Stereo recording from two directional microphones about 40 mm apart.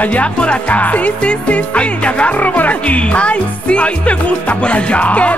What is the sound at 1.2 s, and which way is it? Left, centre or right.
Music, left.